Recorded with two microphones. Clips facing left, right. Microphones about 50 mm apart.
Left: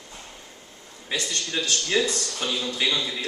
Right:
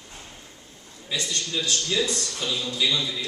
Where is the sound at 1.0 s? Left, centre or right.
Left.